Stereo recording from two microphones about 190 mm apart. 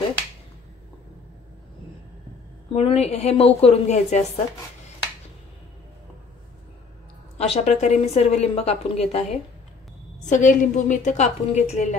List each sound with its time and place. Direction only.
2.7 s a woman's voice: 30° left (ahead or behind)
7.3 s a woman's voice: 35° left (ahead or behind)
10.3 s a woman's voice: 45° left (ahead or behind)